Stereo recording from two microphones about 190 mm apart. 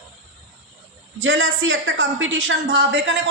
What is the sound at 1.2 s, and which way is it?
A woman's voice, 80° right.